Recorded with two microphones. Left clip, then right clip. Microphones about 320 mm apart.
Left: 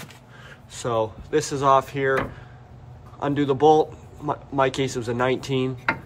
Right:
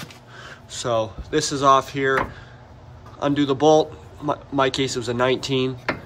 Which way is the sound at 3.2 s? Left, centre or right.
Centre.